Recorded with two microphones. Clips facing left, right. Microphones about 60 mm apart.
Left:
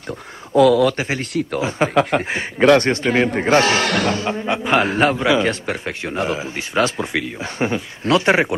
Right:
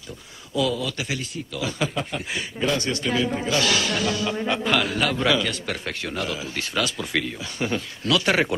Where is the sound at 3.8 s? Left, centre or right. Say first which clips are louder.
Left 6 dB; left.